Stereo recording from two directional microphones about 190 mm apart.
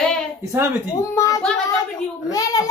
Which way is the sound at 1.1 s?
15° left (ahead or behind).